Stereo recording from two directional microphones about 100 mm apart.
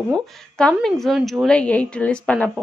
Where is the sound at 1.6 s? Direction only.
10° left (ahead or behind).